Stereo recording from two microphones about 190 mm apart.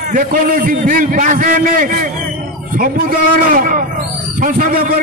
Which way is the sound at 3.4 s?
45° right (ahead or behind).